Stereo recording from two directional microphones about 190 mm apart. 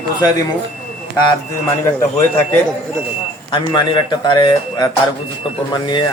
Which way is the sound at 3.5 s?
25° left (ahead or behind).